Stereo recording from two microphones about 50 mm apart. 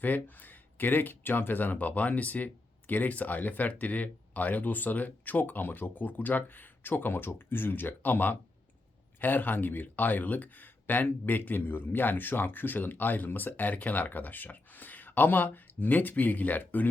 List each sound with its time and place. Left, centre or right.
0.0 s speech: left